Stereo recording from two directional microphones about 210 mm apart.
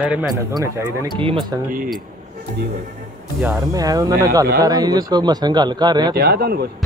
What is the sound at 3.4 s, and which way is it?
A man's voice, 15° right (ahead or behind).